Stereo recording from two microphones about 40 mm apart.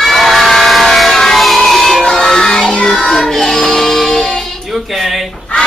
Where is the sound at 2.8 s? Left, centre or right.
Left.